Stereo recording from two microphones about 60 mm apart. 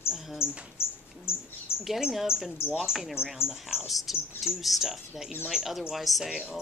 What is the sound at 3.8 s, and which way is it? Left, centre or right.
Speech, centre.